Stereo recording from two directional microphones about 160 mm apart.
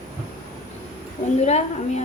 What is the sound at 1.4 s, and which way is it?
Speech, 45° left (ahead or behind).